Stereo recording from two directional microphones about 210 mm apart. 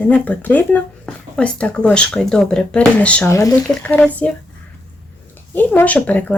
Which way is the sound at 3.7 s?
5° left (ahead or behind).